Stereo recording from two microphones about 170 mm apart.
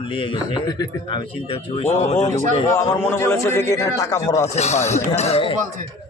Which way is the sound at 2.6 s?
15° left (ahead or behind).